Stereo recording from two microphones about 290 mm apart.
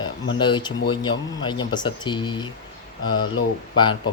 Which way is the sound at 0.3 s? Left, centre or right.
Centre.